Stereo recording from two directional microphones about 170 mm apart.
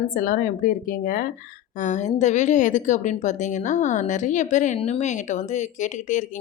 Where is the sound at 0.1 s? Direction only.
55° left (ahead or behind).